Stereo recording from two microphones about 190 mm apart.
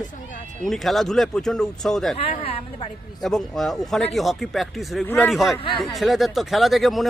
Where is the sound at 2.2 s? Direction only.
30° left (ahead or behind).